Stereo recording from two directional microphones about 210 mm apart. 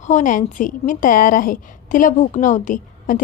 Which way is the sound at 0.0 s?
35° left (ahead or behind).